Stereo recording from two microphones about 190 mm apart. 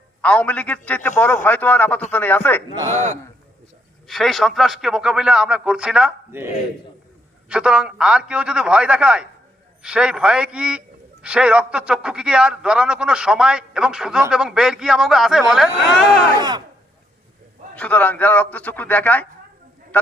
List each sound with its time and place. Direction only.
0.2 s a man's voice: 5° left (ahead or behind)
2.9 s a man's voice: 40° right (ahead or behind)
4.0 s a man's voice: centre (ahead or behind)
16.4 s speech: 20° right (ahead or behind)
17.7 s a man's voice: 10° left (ahead or behind)